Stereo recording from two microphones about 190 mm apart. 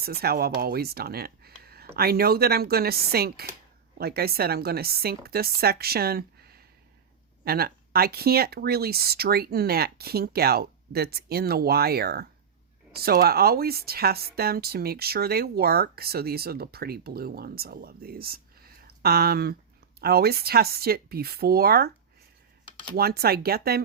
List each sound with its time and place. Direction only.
0.0 s speech: 55° right (ahead or behind)
23.0 s speech: 55° right (ahead or behind)